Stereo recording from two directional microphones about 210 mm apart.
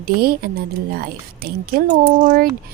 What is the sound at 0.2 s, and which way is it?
Speech, 45° right (ahead or behind).